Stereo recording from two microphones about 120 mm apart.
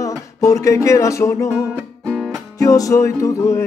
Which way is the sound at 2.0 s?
5° left (ahead or behind).